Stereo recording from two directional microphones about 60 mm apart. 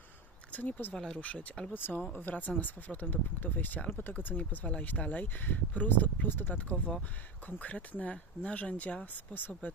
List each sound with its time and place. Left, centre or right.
0.5 s speech: left
0.9 s speech: centre